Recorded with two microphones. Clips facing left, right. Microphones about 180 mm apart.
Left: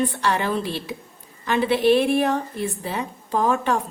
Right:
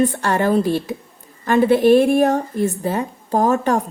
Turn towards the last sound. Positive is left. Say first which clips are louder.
# right 4 dB
turn(degrees=-45)  # may be behind; listen again after turning